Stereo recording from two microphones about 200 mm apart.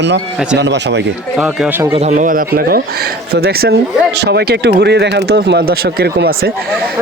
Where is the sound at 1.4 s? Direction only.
5° right (ahead or behind).